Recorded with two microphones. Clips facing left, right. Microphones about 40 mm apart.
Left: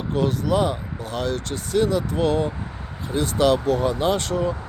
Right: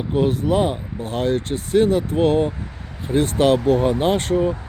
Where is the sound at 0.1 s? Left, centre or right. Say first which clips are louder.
Right 3 dB; right.